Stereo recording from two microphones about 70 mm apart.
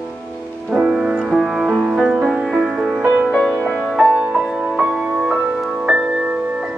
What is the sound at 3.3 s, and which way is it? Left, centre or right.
Music, centre.